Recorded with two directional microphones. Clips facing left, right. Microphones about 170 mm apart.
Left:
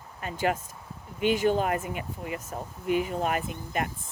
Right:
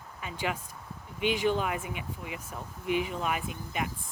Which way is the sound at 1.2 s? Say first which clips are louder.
Left 4 dB; 45° left (ahead or behind).